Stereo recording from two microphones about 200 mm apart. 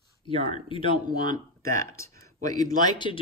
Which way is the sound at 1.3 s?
15° left (ahead or behind).